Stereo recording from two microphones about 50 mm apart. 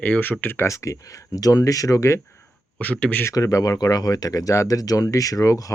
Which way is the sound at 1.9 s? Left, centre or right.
Left.